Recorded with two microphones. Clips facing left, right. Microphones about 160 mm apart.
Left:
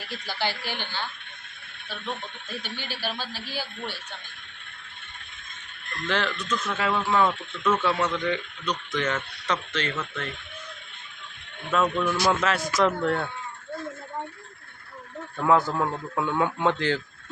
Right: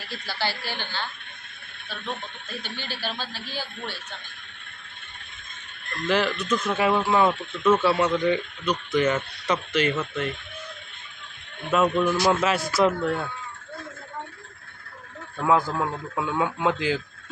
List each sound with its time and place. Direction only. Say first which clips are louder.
0.1 s speech: even; 15° left (ahead or behind)
2.6 s speech: right 1 dB; 15° left (ahead or behind)
6.1 s speech: right 4 dB; 5° right (ahead or behind)
11.7 s speech: right 3 dB; 10° right (ahead or behind)
15.4 s speech: even; 10° right (ahead or behind)